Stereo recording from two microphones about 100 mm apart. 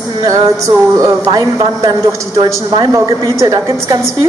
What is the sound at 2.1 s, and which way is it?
A woman's voice, 30° right (ahead or behind).